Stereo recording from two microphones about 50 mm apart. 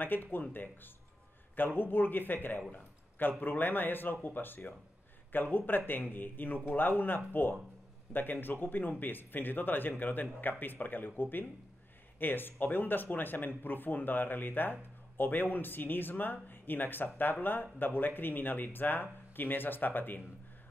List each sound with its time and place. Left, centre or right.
0.0 s speech: left
1.8 s speech: left